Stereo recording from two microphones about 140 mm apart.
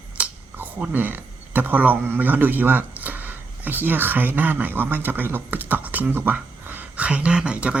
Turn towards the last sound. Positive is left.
turn(degrees=-10)  # may be behind; listen again after turning